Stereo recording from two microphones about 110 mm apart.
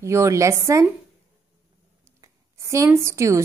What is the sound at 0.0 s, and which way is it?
Speech, 25° right (ahead or behind).